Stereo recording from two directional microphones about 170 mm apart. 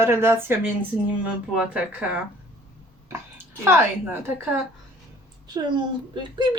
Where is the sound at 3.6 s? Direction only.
15° right (ahead or behind).